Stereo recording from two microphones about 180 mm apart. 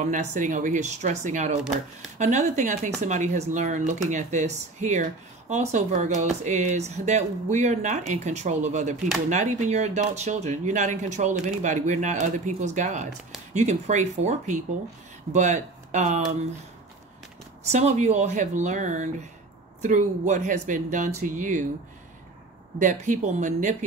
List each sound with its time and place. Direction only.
0.0 s speech: 40° right (ahead or behind)
17.6 s speech: 40° right (ahead or behind)
22.8 s speech: 40° right (ahead or behind)